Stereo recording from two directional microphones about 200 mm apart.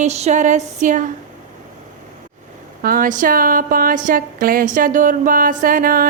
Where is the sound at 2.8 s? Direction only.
45° right (ahead or behind).